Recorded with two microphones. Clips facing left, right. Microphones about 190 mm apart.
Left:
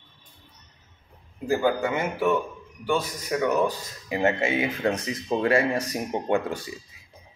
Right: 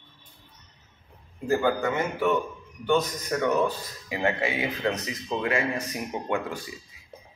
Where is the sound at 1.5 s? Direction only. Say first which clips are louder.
Left 1 dB; 10° left (ahead or behind).